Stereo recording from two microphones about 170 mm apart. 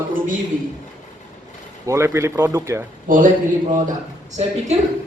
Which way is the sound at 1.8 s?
15° right (ahead or behind).